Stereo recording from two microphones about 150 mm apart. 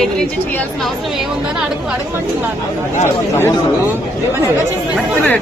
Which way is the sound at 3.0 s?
15° left (ahead or behind).